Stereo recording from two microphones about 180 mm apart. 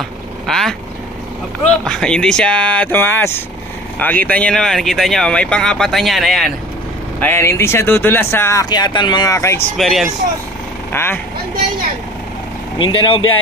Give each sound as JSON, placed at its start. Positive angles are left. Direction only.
{"t": 0.5, "sound": "speech", "side_deg": 0}
{"t": 1.9, "sound": "speech", "side_deg": 5}
{"t": 7.2, "sound": "speech", "side_deg": 10}
{"t": 9.8, "sound": "speech", "side_deg": 0}
{"t": 10.9, "sound": "speech", "side_deg": 10}
{"t": 12.7, "sound": "speech", "side_deg": 25}